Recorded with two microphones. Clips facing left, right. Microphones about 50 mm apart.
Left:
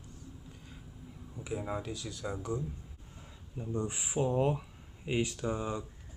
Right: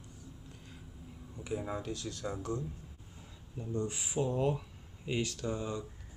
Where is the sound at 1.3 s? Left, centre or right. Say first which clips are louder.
Left 1 dB; centre.